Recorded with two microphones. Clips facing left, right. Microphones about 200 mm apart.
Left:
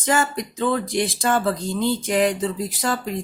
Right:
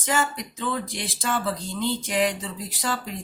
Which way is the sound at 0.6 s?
50° left (ahead or behind).